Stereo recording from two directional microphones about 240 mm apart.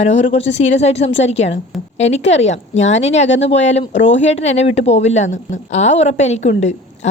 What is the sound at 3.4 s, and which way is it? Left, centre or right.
Speech, left.